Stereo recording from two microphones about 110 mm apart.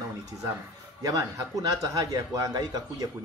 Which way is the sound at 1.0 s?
30° right (ahead or behind).